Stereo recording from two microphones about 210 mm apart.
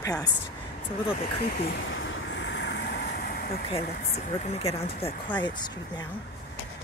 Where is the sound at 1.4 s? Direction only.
50° left (ahead or behind).